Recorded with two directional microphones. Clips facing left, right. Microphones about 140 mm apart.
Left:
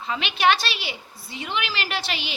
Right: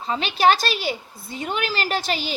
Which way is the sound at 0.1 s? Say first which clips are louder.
Right 3 dB; 35° right (ahead or behind).